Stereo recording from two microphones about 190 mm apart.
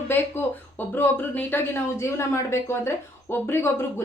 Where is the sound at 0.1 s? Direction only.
10° left (ahead or behind).